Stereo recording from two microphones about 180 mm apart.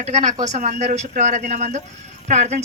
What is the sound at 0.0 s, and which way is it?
A woman's voice, 40° right (ahead or behind).